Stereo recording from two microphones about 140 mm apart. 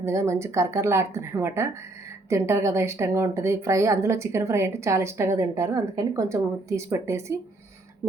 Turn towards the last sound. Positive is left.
turn(degrees=-20)  # may be behind; listen again after turning